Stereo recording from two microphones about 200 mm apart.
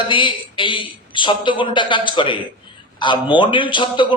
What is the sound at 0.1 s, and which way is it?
A man's voice, 25° left (ahead or behind).